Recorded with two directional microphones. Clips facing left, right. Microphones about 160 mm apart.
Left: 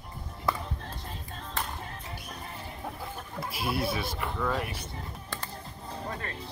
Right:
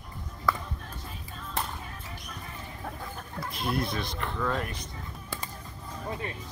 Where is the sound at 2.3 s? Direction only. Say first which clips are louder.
Left 1 dB; 30° left (ahead or behind).